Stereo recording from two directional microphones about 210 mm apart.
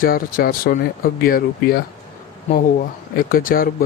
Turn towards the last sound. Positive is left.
turn(degrees=45)  # may be behind; listen again after turning